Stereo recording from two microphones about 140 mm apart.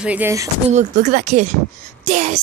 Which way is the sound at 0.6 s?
55° right (ahead or behind).